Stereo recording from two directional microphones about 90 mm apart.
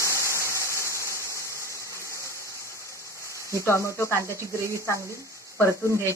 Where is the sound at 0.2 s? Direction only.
30° right (ahead or behind).